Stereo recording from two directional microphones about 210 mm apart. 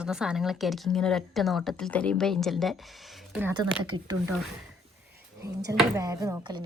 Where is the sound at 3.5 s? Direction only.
20° right (ahead or behind).